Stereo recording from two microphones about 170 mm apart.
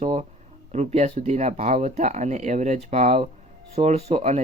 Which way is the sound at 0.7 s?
40° right (ahead or behind).